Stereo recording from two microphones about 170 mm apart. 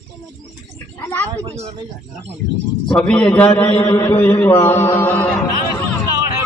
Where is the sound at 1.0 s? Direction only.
10° left (ahead or behind).